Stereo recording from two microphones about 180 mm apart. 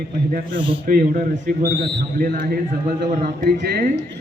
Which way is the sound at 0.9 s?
55° right (ahead or behind).